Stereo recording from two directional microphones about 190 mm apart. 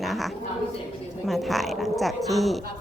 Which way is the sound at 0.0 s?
Centre (ahead or behind).